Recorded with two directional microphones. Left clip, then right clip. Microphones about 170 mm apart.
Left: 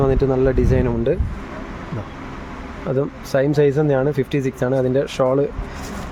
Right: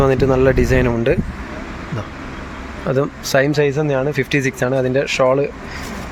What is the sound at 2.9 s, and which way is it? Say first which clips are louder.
Speech: right 3 dB; centre (ahead or behind).